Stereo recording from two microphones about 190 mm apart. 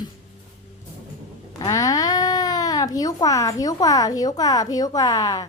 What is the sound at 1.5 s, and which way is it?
A woman's voice, 20° left (ahead or behind).